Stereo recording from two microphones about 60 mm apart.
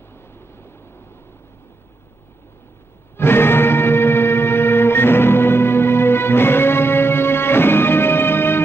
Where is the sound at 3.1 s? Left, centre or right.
Left.